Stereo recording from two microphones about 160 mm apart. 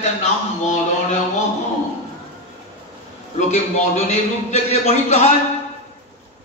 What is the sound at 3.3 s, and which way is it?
A man's voice, 45° left (ahead or behind).